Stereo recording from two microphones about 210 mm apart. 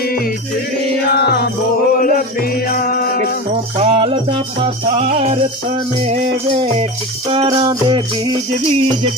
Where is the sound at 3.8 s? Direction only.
30° right (ahead or behind).